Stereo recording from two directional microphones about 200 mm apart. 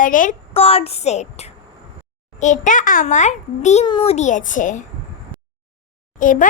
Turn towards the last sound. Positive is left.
turn(degrees=40)  # may be behind; listen again after turning